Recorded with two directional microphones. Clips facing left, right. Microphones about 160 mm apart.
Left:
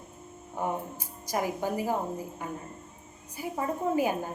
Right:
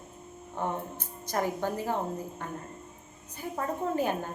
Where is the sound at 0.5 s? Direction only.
10° left (ahead or behind).